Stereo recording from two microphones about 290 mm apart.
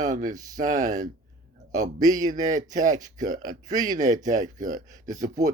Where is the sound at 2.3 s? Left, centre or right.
Right.